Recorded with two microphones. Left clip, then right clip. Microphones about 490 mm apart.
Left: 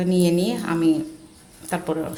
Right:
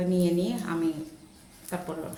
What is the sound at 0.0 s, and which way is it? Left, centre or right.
Speech, right.